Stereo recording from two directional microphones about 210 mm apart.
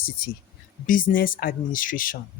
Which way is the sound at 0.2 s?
45° left (ahead or behind).